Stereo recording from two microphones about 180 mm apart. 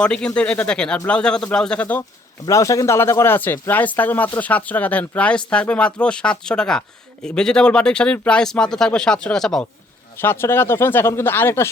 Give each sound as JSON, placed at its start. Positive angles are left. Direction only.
{"t": 0.0, "sound": "speech", "side_deg": 5}
{"t": 10.2, "sound": "speech", "side_deg": 15}